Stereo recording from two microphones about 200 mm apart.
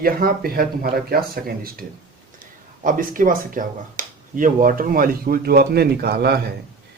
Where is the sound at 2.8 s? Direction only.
45° right (ahead or behind).